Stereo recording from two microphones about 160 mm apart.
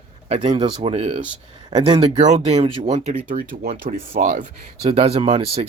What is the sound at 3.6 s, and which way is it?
Speech, 65° right (ahead or behind).